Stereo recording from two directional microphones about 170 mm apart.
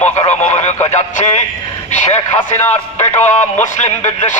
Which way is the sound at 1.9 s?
40° left (ahead or behind).